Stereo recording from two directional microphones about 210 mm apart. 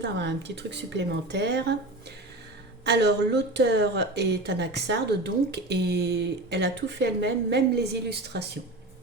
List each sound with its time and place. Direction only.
0.0 s speech: 55° right (ahead or behind)
2.8 s speech: 55° right (ahead or behind)